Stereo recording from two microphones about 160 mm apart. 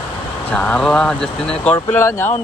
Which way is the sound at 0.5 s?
5° left (ahead or behind).